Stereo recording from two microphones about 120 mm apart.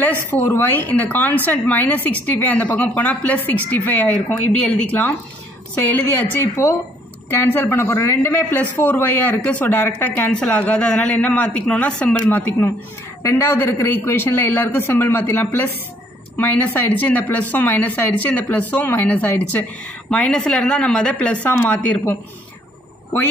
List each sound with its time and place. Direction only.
0.0 s speech: 15° left (ahead or behind)